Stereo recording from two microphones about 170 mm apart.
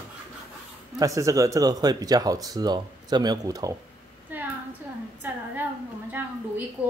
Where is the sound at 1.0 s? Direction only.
20° right (ahead or behind).